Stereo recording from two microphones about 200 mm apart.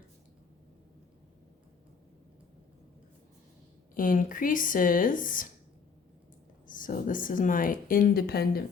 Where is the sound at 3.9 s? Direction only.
40° left (ahead or behind).